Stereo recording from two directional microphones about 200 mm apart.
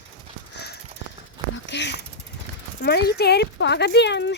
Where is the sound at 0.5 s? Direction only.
55° left (ahead or behind).